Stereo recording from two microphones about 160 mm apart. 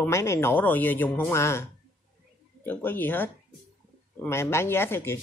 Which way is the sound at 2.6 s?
10° left (ahead or behind).